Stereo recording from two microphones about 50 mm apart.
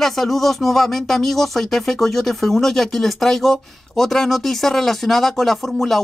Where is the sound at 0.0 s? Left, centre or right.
Centre.